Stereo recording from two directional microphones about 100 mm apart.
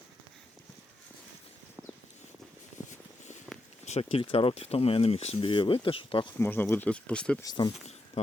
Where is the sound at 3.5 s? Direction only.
15° right (ahead or behind).